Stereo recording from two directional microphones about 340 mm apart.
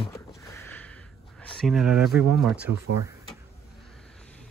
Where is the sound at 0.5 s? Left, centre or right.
Centre.